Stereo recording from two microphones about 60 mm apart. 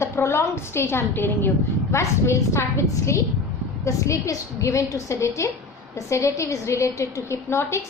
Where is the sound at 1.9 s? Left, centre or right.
Left.